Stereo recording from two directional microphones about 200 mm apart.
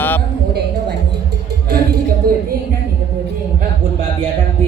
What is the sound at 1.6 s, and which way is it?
Music, 50° right (ahead or behind).